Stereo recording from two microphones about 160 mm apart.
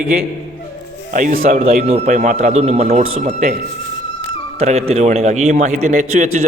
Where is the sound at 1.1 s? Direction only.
55° right (ahead or behind).